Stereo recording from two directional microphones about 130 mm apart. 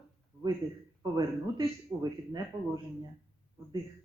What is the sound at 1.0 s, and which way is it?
Speech, 25° right (ahead or behind).